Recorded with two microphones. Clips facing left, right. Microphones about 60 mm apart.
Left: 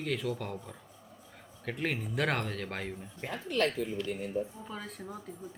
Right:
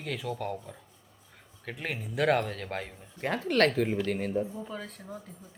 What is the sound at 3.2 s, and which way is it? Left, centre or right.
Speech, right.